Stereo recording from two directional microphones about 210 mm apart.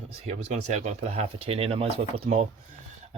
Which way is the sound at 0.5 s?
35° right (ahead or behind).